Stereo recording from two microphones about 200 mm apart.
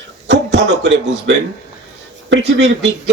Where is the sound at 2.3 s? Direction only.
60° right (ahead or behind).